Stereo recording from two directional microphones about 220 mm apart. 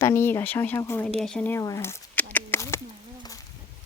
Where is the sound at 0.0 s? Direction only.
10° left (ahead or behind).